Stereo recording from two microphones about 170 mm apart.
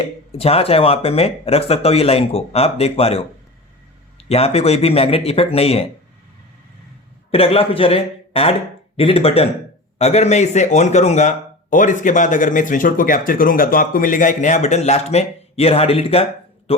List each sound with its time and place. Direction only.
0.0 s speech: 35° left (ahead or behind)
7.3 s a man's voice: 35° left (ahead or behind)